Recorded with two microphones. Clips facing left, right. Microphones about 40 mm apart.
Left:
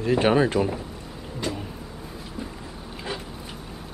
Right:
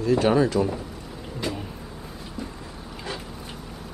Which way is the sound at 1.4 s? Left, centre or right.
Centre.